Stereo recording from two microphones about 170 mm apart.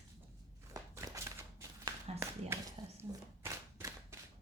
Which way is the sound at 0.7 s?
20° right (ahead or behind).